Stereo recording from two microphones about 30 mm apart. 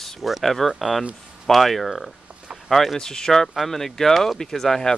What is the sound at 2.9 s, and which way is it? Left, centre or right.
Speech, centre.